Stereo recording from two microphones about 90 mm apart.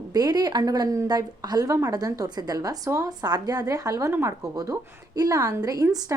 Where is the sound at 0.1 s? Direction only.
50° right (ahead or behind); by 4.4 s 30° right (ahead or behind).